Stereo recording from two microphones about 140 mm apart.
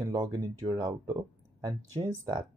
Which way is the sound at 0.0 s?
30° right (ahead or behind).